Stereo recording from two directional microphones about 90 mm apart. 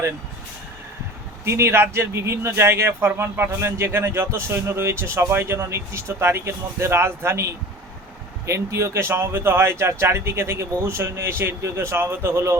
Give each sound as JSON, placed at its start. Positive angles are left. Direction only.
{"t": 1.5, "sound": "speech", "side_deg": -30}